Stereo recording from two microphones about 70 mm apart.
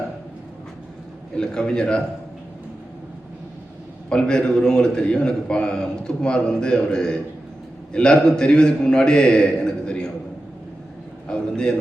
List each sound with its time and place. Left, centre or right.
1.4 s a man's voice: centre
4.1 s a man's voice: centre
11.3 s a sound: centre